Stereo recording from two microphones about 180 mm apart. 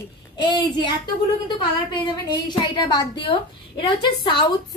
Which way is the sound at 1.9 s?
25° left (ahead or behind).